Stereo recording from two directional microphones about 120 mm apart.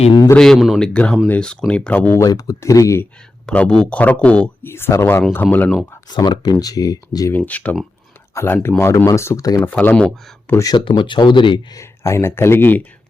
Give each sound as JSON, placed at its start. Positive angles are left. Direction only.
{"t": 0.3, "sound": "speech", "side_deg": 5}
{"t": 2.2, "sound": "speech", "side_deg": 30}
{"t": 3.4, "sound": "speech", "side_deg": 10}
{"t": 4.7, "sound": "speech", "side_deg": 20}
{"t": 6.1, "sound": "speech", "side_deg": 40}
{"t": 7.3, "sound": "speech", "side_deg": 15}
{"t": 9.6, "sound": "speech", "side_deg": 10}
{"t": 10.6, "sound": "speech", "side_deg": 35}
{"t": 11.8, "sound": "speech", "side_deg": 25}